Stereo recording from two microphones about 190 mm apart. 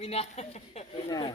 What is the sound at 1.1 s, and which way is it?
Speech, 20° left (ahead or behind).